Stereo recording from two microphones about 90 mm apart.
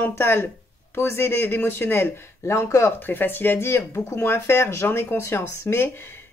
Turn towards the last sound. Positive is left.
turn(degrees=30)  # may be behind; listen again after turning